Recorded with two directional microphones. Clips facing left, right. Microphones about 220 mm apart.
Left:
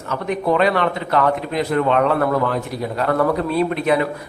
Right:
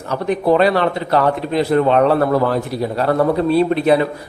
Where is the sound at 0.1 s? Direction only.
35° right (ahead or behind).